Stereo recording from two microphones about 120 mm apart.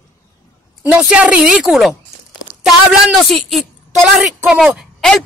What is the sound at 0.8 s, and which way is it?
A woman's voice, 10° right (ahead or behind).